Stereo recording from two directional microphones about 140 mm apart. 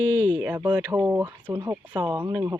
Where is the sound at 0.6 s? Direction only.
25° right (ahead or behind).